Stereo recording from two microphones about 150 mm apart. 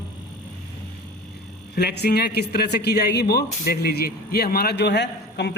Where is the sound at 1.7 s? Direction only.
90° left.